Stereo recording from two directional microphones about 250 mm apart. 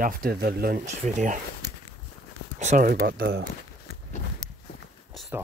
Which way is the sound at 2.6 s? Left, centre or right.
Right.